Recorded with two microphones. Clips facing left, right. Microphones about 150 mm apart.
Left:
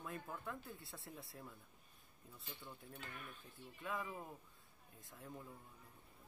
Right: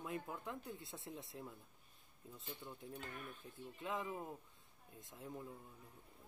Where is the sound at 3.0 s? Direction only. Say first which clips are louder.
Right 3 dB; 40° right (ahead or behind).